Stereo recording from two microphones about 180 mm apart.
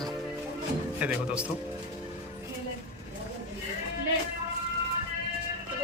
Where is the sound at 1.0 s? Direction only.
5° right (ahead or behind).